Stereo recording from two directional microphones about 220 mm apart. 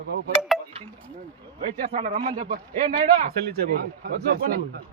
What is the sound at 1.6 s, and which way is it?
Speech, 30° right (ahead or behind).